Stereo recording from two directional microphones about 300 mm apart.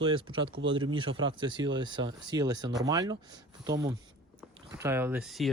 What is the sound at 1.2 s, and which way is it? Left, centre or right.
Speech, centre.